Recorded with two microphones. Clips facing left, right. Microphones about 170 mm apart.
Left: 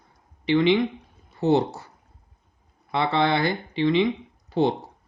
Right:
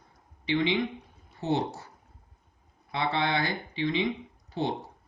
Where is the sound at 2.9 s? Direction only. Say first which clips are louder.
Left 6 dB; 75° left (ahead or behind).